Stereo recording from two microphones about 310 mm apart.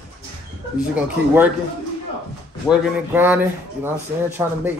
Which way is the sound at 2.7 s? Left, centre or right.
Centre.